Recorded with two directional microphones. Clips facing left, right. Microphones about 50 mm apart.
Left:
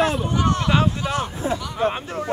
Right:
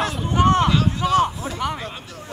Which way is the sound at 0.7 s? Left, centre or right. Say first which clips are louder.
Right 1 dB; left.